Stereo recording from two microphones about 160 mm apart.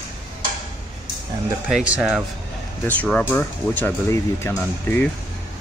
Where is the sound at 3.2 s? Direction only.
10° left (ahead or behind).